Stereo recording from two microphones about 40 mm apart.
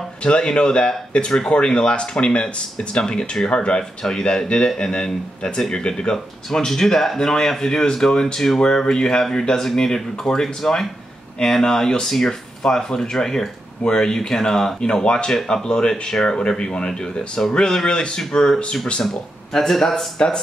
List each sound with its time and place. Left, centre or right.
0.2 s speech: left
6.1 s speech: centre
19.0 s speech: centre